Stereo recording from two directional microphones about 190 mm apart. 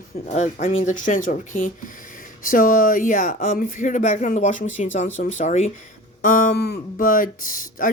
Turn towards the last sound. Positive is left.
turn(degrees=50)  # may be behind; listen again after turning